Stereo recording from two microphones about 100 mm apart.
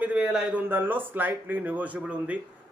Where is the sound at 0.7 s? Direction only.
20° right (ahead or behind).